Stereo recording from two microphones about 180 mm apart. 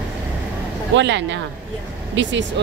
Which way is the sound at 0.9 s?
80° right.